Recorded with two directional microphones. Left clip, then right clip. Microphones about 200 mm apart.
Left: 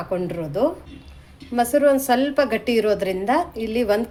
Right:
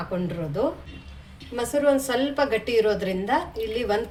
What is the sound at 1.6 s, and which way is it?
A woman's voice, 45° left (ahead or behind).